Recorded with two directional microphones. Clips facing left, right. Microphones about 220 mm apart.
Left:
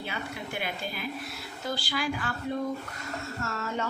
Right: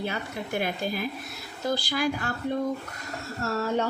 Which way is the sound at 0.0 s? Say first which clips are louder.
Right 4 dB; 45° right (ahead or behind).